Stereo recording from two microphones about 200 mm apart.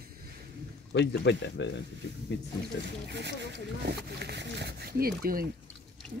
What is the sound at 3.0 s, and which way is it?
Speech, 60° right (ahead or behind).